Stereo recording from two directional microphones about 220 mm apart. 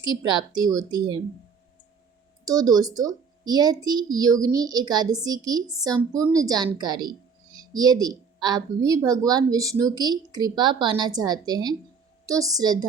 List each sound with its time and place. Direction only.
0.0 s speech: 20° right (ahead or behind)
2.4 s speech: 15° right (ahead or behind)